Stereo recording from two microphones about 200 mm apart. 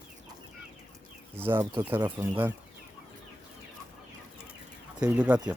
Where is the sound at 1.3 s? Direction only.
10° right (ahead or behind).